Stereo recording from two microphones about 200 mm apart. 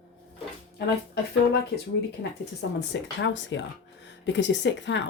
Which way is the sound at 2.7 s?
65° left (ahead or behind).